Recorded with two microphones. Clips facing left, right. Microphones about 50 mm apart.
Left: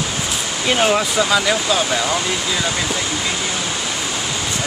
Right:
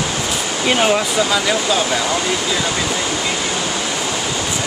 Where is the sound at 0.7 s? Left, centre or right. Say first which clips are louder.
Even; centre.